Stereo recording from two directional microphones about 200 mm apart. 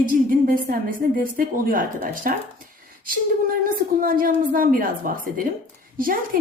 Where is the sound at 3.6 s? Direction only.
45° right (ahead or behind).